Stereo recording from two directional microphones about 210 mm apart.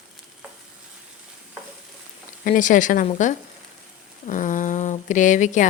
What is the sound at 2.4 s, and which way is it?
A woman's voice, 40° left (ahead or behind).